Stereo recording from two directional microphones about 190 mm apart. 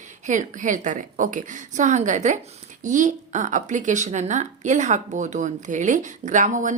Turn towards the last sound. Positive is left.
turn(degrees=-40)  # may be behind; listen again after turning